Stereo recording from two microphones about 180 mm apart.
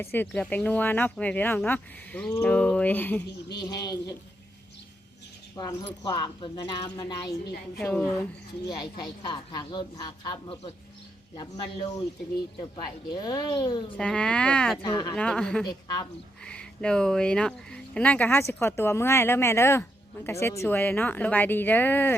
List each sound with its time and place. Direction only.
0.0 s speech: 10° left (ahead or behind)
3.6 s speech: 20° left (ahead or behind)
5.5 s speech: 25° left (ahead or behind)
7.8 s speech: 5° left (ahead or behind)
8.6 s speech: 25° left (ahead or behind)
13.2 s speech: 20° left (ahead or behind)
13.9 s speech: 5° left (ahead or behind)
14.8 s speech: 20° left (ahead or behind)
15.1 s speech: 5° left (ahead or behind)